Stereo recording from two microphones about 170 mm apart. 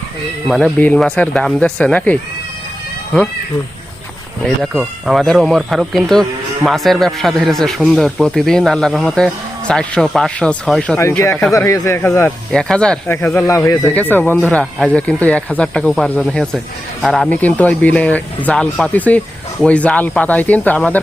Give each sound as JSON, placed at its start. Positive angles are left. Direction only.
{"t": 0.4, "sound": "speech", "side_deg": 0}
{"t": 4.4, "sound": "speech", "side_deg": 0}
{"t": 10.9, "sound": "speech", "side_deg": 15}
{"t": 12.5, "sound": "speech", "side_deg": 5}
{"t": 14.5, "sound": "speech", "side_deg": 0}